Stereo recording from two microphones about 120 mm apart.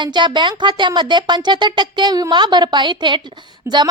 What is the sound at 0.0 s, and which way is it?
A woman's voice, 40° right (ahead or behind).